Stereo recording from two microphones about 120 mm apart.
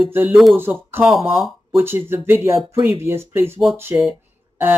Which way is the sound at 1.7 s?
20° right (ahead or behind).